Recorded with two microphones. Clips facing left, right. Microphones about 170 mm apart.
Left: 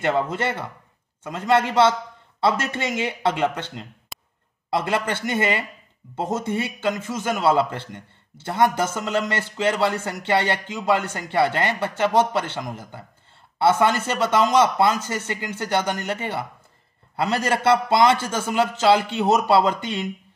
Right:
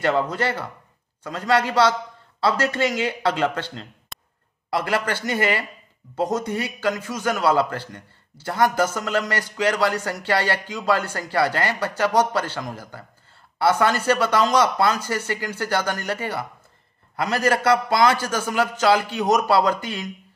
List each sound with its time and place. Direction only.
0.0 s a man's voice: 20° left (ahead or behind)
4.1 s a sound: centre (ahead or behind)
4.6 s a man's voice: 25° left (ahead or behind)